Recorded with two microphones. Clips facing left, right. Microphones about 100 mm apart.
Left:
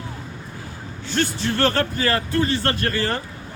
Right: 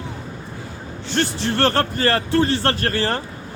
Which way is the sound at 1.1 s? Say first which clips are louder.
Right 1 dB; 35° right (ahead or behind).